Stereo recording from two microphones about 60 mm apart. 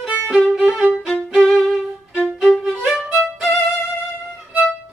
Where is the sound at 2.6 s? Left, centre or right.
Centre.